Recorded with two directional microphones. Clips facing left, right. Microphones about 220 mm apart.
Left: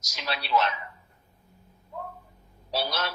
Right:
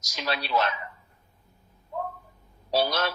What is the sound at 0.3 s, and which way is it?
Speech, 40° right (ahead or behind).